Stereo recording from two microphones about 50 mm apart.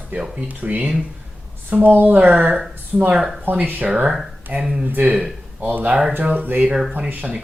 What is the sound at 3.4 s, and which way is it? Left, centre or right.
Speech, right.